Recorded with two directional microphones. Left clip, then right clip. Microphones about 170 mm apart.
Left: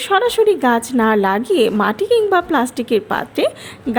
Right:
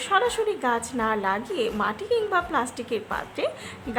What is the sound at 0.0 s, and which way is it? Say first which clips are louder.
A woman's voice: left 9 dB; 35° left (ahead or behind).